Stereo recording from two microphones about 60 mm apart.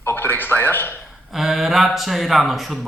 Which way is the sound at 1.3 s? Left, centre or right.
Centre.